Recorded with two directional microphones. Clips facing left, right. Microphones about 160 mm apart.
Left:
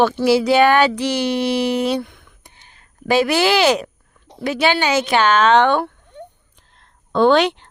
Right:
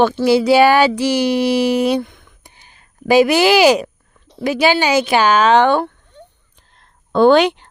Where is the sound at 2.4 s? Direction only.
10° right (ahead or behind).